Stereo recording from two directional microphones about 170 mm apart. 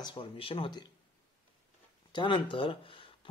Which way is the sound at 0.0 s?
30° left (ahead or behind).